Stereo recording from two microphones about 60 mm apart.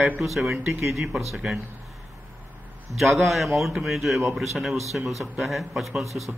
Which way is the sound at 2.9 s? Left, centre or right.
Centre.